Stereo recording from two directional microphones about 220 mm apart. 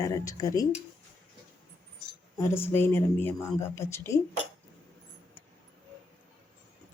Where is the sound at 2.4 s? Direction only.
10° left (ahead or behind).